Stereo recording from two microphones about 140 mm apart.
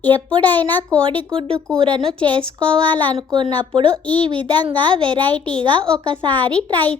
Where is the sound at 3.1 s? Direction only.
35° right (ahead or behind).